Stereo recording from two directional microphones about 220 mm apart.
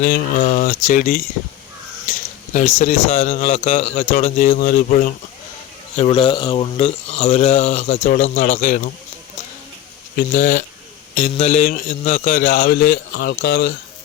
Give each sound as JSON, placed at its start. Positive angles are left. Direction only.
{"t": 0.0, "sound": "a man's voice", "side_deg": 40}
{"t": 2.5, "sound": "a man's voice", "side_deg": 35}
{"t": 6.0, "sound": "speech", "side_deg": 25}
{"t": 10.2, "sound": "speech", "side_deg": 45}
{"t": 11.1, "sound": "a man's voice", "side_deg": 30}